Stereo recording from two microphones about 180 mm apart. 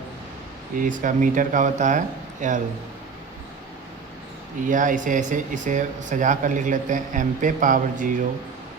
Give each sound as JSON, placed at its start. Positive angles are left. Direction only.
{"t": 0.8, "sound": "speech", "side_deg": -45}
{"t": 4.6, "sound": "speech", "side_deg": -45}